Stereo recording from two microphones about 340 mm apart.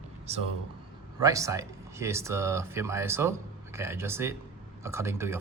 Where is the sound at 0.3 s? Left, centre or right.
Centre.